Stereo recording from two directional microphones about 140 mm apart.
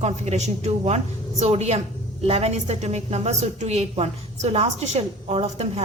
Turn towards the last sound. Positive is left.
turn(degrees=-50)  # may be behind; listen again after turning